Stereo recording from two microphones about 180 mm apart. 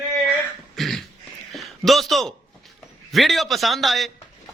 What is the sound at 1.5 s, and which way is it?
A man's voice, centre (ahead or behind).